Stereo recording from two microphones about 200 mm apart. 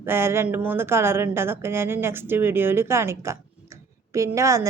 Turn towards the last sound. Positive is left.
turn(degrees=-15)  # may be behind; listen again after turning